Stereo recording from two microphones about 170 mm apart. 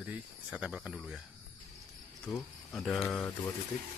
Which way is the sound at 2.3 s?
Centre (ahead or behind).